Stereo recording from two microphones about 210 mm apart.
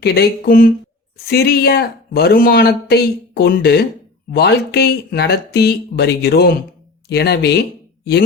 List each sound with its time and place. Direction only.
0.0 s speech: 50° left (ahead or behind)